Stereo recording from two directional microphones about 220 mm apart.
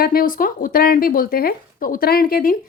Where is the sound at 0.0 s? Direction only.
40° left (ahead or behind).